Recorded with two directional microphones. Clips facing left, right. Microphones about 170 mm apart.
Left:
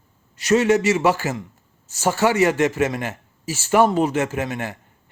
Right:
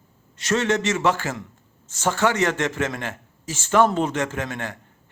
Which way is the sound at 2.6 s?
15° left (ahead or behind).